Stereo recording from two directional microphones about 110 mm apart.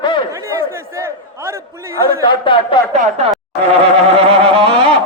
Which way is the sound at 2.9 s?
75° right (ahead or behind).